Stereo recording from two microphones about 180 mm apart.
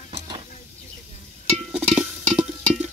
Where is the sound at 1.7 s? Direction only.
5° right (ahead or behind).